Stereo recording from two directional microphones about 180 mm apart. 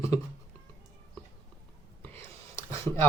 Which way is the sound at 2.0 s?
10° left (ahead or behind).